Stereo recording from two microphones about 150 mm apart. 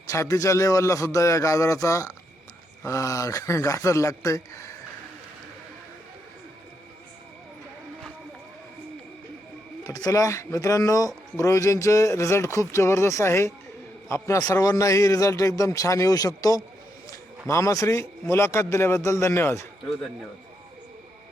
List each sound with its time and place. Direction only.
0.1 s speech: 20° left (ahead or behind)
9.8 s speech: 25° left (ahead or behind)